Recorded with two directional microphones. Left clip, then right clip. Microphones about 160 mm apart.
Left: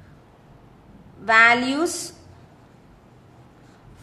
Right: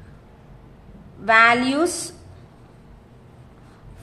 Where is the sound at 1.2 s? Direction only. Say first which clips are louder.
Right 1 dB; 10° right (ahead or behind).